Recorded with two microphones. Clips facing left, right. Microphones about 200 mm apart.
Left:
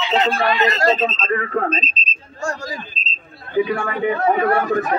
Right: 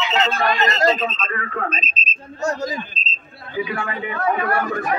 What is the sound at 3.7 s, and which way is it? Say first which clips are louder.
Speech: left 6 dB; 35° left (ahead or behind).